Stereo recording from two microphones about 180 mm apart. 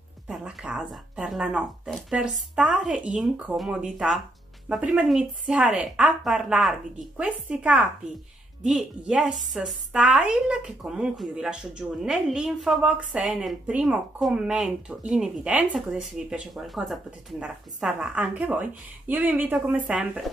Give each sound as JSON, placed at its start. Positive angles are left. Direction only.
{"t": 0.3, "sound": "a woman's voice", "side_deg": -5}